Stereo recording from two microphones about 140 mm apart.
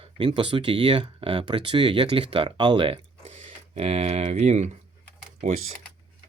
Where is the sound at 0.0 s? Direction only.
40° right (ahead or behind).